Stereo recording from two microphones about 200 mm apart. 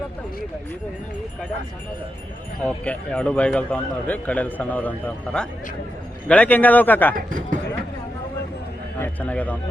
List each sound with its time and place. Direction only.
2.6 s speech: 5° left (ahead or behind)
7.3 s speech: 45° right (ahead or behind)
9.0 s a man's voice: 5° left (ahead or behind)